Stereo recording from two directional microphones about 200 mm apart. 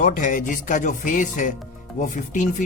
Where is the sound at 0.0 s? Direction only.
40° left (ahead or behind).